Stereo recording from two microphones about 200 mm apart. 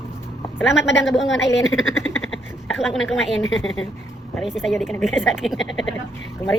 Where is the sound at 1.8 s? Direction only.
80° left.